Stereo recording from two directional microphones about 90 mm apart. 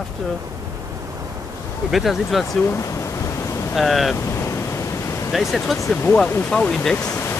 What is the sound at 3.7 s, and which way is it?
Speech, centre (ahead or behind).